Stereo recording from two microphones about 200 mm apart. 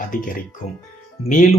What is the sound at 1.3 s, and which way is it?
Speech, 40° left (ahead or behind).